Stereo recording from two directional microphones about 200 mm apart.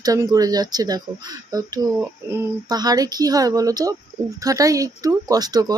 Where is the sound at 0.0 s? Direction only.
20° right (ahead or behind).